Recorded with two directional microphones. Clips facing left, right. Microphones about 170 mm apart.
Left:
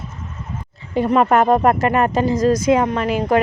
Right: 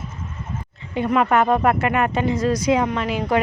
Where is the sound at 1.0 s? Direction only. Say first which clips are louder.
Left 3 dB; 35° left (ahead or behind).